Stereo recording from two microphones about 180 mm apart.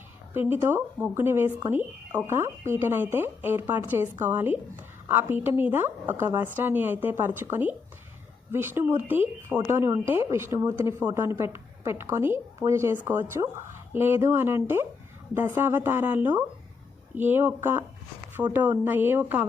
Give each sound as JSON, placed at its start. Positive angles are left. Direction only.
{"t": 0.3, "sound": "a woman's voice", "side_deg": -10}